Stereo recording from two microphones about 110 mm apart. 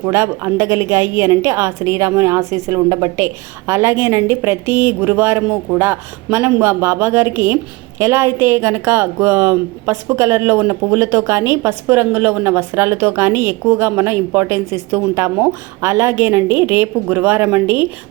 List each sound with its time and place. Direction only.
0.0 s speech: 25° right (ahead or behind)